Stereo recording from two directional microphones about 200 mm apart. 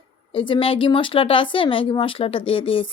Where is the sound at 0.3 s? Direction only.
25° left (ahead or behind).